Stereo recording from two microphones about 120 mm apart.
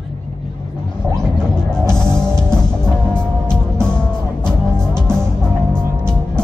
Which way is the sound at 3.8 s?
10° left (ahead or behind).